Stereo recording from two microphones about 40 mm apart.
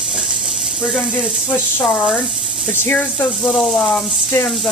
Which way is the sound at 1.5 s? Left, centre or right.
Left.